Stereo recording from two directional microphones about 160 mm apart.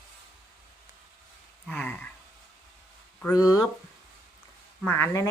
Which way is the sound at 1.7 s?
10° left (ahead or behind).